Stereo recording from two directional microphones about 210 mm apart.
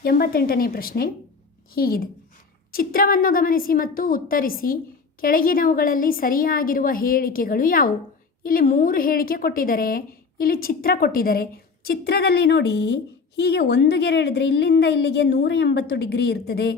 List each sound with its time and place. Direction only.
0.0 s a woman's voice: 45° left (ahead or behind)